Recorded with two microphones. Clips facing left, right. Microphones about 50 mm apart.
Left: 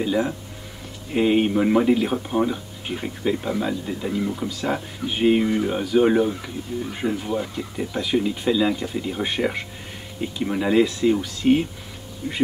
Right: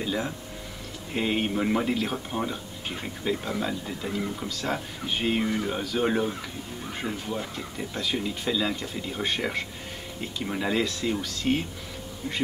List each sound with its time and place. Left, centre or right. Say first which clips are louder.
0.0 s speech: left 7 dB; centre